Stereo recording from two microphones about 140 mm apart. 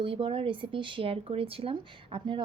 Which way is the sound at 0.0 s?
40° right (ahead or behind).